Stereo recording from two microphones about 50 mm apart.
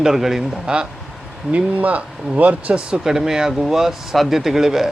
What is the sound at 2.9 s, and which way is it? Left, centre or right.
Speech, centre.